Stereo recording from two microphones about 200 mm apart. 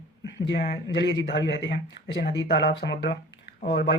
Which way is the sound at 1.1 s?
60° left (ahead or behind).